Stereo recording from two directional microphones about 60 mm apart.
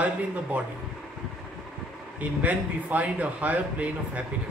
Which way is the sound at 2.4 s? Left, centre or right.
Right.